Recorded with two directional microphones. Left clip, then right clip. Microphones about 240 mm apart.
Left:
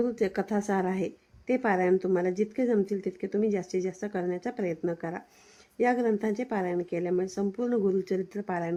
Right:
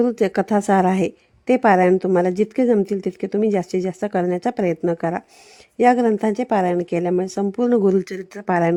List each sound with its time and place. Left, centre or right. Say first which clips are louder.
0.0 s speech: right 10 dB; right